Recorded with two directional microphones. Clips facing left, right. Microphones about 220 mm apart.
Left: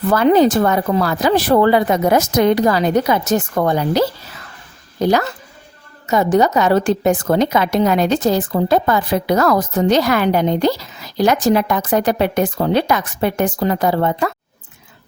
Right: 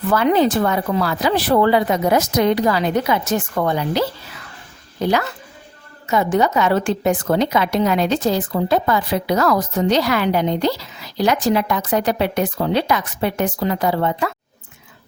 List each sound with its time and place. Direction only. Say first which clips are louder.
0.1 s a woman's voice: left 4 dB; 40° left (ahead or behind)